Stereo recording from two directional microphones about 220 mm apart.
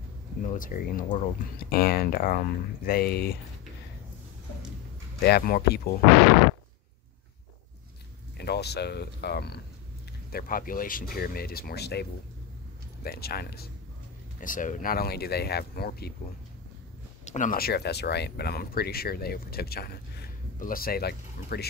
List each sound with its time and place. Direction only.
0.4 s speech: 35° left (ahead or behind)
5.2 s speech: 45° left (ahead or behind)
8.4 s speech: 50° left (ahead or behind)
17.2 s speech: 35° left (ahead or behind)